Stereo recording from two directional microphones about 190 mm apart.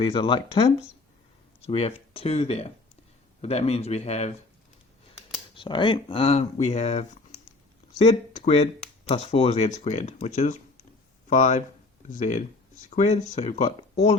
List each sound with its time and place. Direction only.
0.0 s speech: 25° left (ahead or behind)
5.5 s speech: 25° left (ahead or behind)